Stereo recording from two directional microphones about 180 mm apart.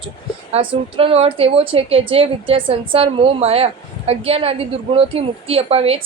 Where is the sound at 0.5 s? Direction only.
30° right (ahead or behind).